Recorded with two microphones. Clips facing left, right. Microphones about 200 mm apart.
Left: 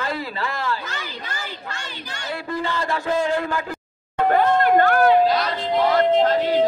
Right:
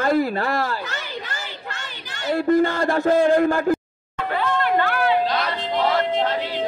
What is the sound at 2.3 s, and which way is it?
Speech, 50° right (ahead or behind).